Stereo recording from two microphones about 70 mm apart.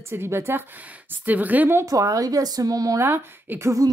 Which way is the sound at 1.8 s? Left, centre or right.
Right.